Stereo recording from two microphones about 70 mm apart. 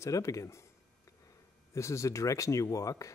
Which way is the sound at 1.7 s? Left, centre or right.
Left.